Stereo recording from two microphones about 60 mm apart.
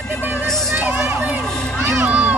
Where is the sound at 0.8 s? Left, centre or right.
Right.